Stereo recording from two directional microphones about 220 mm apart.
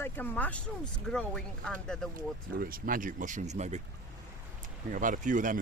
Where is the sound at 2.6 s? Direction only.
40° right (ahead or behind).